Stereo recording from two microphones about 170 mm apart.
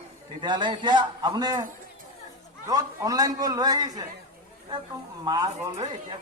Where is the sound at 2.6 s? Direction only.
20° right (ahead or behind).